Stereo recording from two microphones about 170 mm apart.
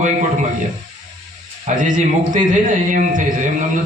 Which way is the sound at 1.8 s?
50° right (ahead or behind).